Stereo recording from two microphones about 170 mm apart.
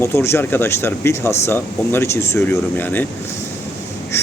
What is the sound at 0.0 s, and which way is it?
Speech, 15° left (ahead or behind).